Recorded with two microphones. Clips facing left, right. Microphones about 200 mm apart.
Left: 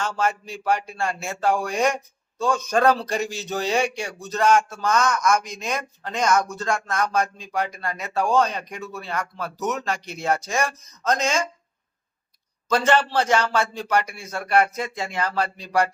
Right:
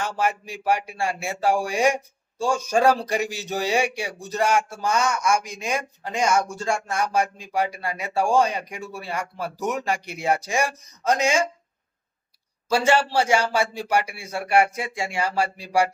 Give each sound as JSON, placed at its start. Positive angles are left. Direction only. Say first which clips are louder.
{"t": 0.0, "sound": "speech", "louder": "even", "side_deg": -15}
{"t": 12.6, "sound": "speech", "louder": "even", "side_deg": -10}